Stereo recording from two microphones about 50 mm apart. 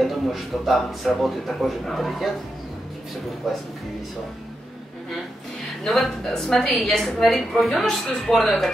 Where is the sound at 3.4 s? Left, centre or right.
Centre.